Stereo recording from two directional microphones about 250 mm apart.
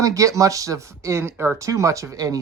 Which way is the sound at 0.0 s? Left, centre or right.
Centre.